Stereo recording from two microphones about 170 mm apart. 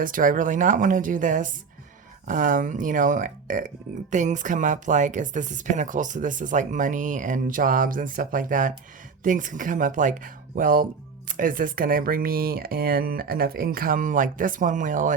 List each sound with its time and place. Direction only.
0.0 s speech: 50° right (ahead or behind)